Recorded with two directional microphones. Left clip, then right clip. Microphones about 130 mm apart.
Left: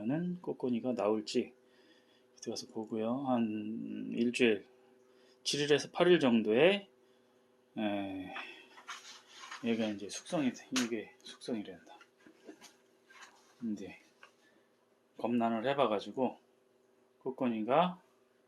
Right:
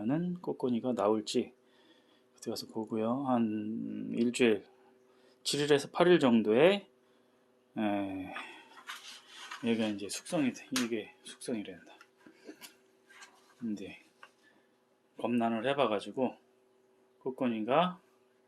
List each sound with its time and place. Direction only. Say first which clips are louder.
0.0 s speech: right 3 dB; 35° right (ahead or behind)
9.6 s speech: right 2 dB; 30° right (ahead or behind)
13.7 s speech: right 2 dB; 15° right (ahead or behind)
15.1 s speech: right 1 dB; 15° right (ahead or behind)